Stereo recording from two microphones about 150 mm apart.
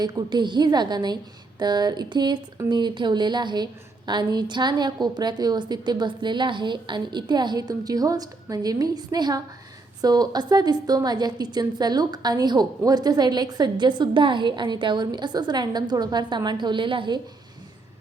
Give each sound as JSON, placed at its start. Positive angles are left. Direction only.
{"t": 0.0, "sound": "a woman's voice", "side_deg": -30}